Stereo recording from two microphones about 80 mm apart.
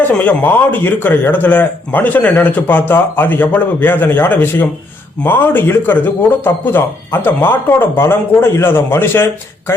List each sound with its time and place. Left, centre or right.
0.2 s a man's voice: left